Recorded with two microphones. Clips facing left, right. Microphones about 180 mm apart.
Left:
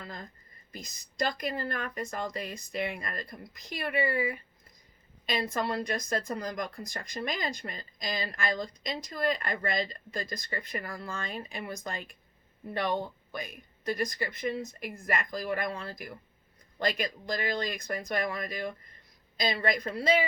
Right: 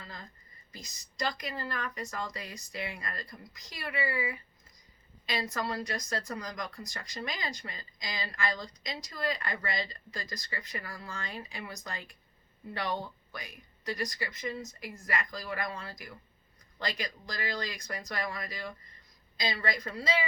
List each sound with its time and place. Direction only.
0.0 s a sound: 50° left (ahead or behind)
0.7 s speech: 55° left (ahead or behind)
5.6 s speech: 55° left (ahead or behind)